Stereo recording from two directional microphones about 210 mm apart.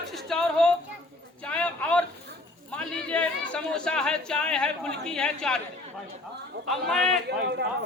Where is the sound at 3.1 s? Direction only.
5° left (ahead or behind).